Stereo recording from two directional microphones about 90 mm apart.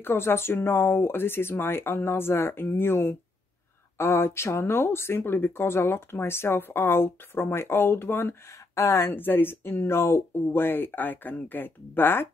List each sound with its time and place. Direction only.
0.0 s speech: 25° left (ahead or behind)